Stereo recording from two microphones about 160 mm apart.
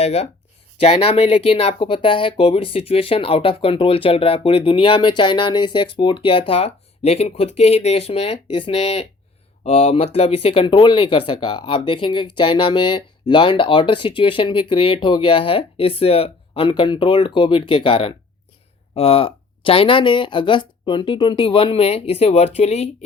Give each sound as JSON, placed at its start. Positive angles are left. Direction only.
{"t": 0.0, "sound": "speech", "side_deg": 40}